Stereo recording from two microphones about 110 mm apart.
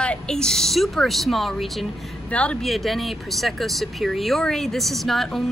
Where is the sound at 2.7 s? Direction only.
Centre (ahead or behind).